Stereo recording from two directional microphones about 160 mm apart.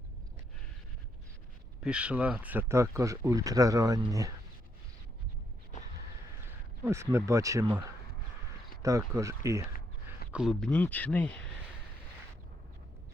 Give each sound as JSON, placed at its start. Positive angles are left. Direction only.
{"t": 1.8, "sound": "speech", "side_deg": -5}
{"t": 6.8, "sound": "speech", "side_deg": -15}
{"t": 10.3, "sound": "speech", "side_deg": 0}